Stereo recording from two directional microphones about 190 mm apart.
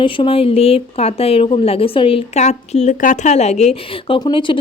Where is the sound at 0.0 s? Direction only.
25° left (ahead or behind).